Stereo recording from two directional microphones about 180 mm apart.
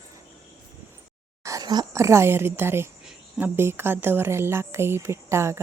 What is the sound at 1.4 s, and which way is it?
Speech, 20° right (ahead or behind).